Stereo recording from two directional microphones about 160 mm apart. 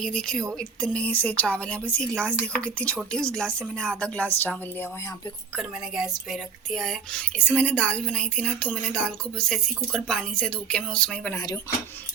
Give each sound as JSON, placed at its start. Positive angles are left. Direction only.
{"t": 0.0, "sound": "a woman's voice", "side_deg": 5}
{"t": 5.5, "sound": "speech", "side_deg": 0}
{"t": 11.3, "sound": "speech", "side_deg": 20}